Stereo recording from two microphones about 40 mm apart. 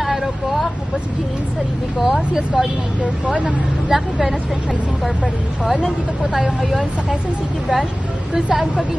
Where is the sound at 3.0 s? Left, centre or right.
Right.